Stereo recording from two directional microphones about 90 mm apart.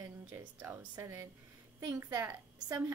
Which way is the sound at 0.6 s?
20° right (ahead or behind).